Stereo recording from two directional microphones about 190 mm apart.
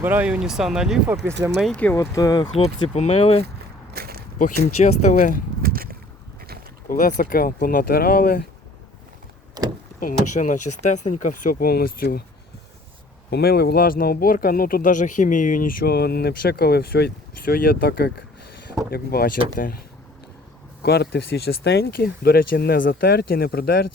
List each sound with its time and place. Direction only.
0.0 s speech: 10° right (ahead or behind)
1.3 s speech: 65° right (ahead or behind)
1.5 s speech: 5° left (ahead or behind)
2.6 s speech: 35° left (ahead or behind)
3.9 s a sound: 55° right (ahead or behind)
4.8 s speech: 35° left (ahead or behind)
5.6 s a sound: 50° right (ahead or behind)
6.8 s speech: 45° left (ahead or behind)
10.0 s speech: 45° left (ahead or behind)
13.3 s speech: 55° left (ahead or behind)
20.8 s speech: 60° left (ahead or behind)